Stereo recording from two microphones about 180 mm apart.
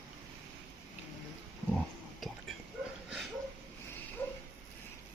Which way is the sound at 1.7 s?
Centre (ahead or behind).